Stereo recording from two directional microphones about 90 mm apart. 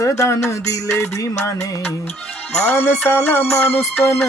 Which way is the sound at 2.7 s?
30° left (ahead or behind).